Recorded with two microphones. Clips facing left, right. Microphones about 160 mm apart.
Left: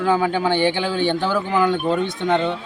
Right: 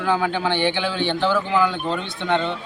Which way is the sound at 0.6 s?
45° left (ahead or behind).